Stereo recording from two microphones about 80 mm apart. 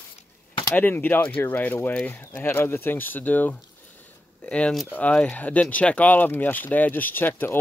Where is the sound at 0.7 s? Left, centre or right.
Left.